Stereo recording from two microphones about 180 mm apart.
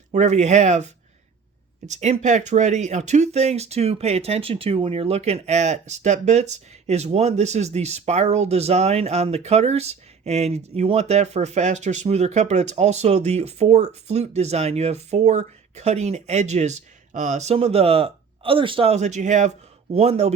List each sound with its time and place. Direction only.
0.1 s speech: 40° right (ahead or behind)
1.9 s speech: 40° right (ahead or behind)